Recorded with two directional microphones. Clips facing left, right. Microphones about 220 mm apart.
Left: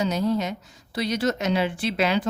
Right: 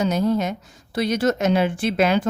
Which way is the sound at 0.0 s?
50° right (ahead or behind).